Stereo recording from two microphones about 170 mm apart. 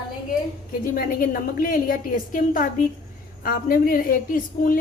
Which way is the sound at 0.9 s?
60° left (ahead or behind).